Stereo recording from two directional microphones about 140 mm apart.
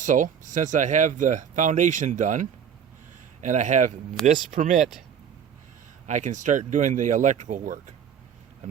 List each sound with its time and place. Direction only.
0.0 s speech: 65° right (ahead or behind)
4.2 s speech: 5° left (ahead or behind)
4.5 s speech: 65° right (ahead or behind)
6.1 s speech: 60° right (ahead or behind)